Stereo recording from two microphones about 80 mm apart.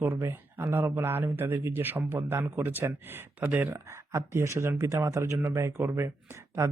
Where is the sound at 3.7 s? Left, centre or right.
Right.